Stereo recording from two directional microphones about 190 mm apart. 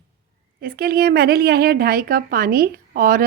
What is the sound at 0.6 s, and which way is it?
A woman's voice, 50° right (ahead or behind).